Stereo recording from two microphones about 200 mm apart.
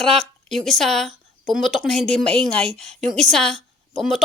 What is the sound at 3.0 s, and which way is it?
Speech, 35° right (ahead or behind).